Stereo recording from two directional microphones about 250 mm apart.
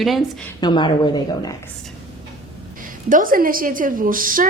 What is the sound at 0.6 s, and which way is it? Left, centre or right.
Speech, centre.